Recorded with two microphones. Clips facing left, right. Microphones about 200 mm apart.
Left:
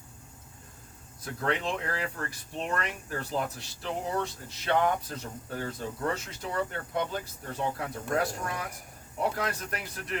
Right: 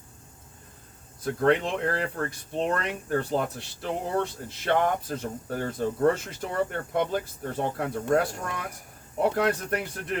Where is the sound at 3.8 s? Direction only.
50° right (ahead or behind).